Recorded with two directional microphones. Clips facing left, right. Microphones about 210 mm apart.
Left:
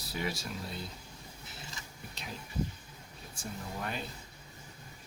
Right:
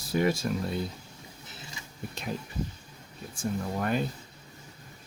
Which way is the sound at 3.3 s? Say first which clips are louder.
Right 10 dB; 50° right (ahead or behind).